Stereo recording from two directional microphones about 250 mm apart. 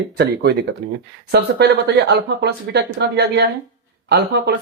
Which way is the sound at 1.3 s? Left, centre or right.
Right.